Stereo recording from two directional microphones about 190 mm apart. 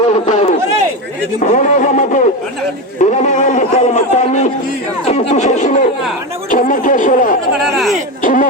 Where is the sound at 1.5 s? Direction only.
40° left (ahead or behind).